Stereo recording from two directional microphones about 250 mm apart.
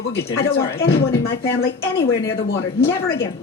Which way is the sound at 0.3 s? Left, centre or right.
Left.